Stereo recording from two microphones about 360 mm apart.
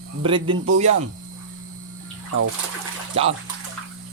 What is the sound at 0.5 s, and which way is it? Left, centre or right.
Speech, right.